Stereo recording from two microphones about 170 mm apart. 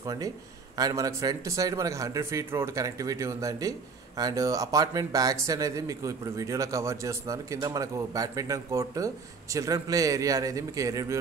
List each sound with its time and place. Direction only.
0.0 s a man's voice: 20° right (ahead or behind)